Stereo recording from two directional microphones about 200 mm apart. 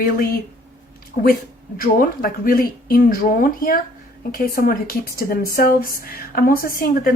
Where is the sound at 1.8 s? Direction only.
45° left (ahead or behind).